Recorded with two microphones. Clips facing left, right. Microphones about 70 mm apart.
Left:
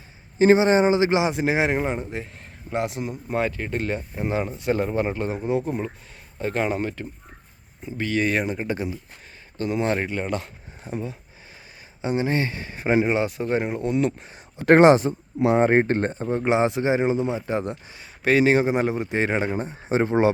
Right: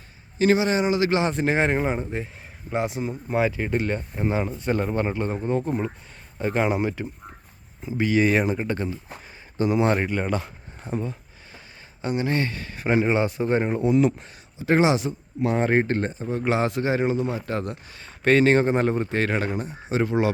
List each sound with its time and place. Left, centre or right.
0.3 s a man's voice: left
1.2 s a man's voice: centre
8.6 s speech: centre
9.6 s a man's voice: centre
12.0 s a man's voice: centre
13.1 s a man's voice: centre
14.6 s speech: left
15.4 s a man's voice: centre
18.2 s a man's voice: centre; by 20.3 s left